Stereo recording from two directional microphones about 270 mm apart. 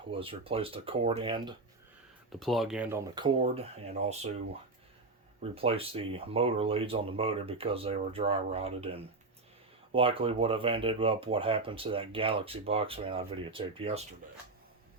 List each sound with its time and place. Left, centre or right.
0.1 s speech: centre
2.3 s speech: centre; by 4.3 s right
5.4 s speech: right